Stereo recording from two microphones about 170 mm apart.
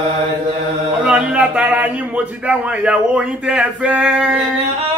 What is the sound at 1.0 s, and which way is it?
A man's voice, 5° right (ahead or behind).